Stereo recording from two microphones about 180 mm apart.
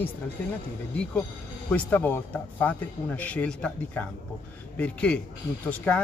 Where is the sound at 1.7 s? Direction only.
10° left (ahead or behind).